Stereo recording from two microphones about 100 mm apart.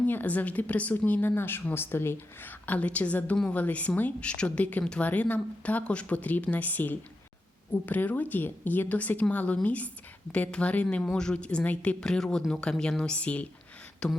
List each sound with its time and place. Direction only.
0.0 s a woman's voice: 15° left (ahead or behind)